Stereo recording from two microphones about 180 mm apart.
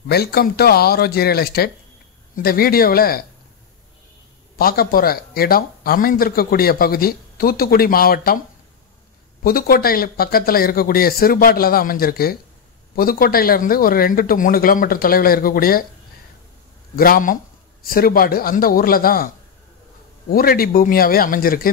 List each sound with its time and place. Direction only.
0.1 s speech: 60° left (ahead or behind)
4.6 s speech: 55° left (ahead or behind)
9.4 s speech: 55° left (ahead or behind)
16.9 s speech: 55° left (ahead or behind)